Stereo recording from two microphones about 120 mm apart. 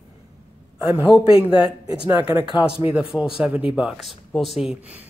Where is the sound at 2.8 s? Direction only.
10° right (ahead or behind).